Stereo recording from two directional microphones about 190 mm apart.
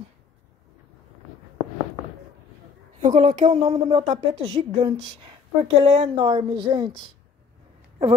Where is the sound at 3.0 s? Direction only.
35° right (ahead or behind).